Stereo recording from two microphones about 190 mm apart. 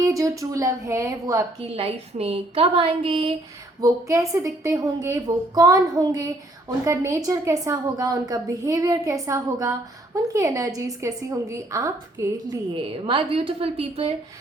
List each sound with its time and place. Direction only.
0.0 s a woman's voice: 15° right (ahead or behind)
1.7 s a woman's voice: 30° right (ahead or behind)
3.8 s a woman's voice: 20° right (ahead or behind)